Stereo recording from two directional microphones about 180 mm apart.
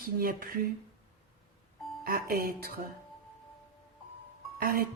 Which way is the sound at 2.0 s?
55° right (ahead or behind).